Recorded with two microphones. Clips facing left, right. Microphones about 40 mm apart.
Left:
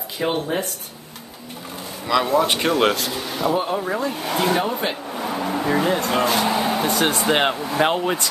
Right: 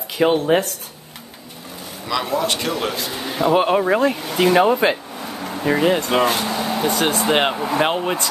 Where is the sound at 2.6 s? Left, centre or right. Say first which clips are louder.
Left 5 dB; left.